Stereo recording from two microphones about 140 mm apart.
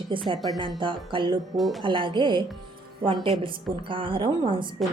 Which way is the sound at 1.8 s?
35° right (ahead or behind).